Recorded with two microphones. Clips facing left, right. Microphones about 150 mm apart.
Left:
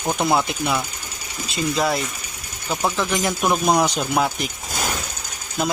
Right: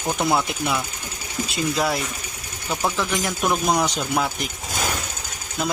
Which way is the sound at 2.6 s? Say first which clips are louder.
Left 2 dB; 5° left (ahead or behind).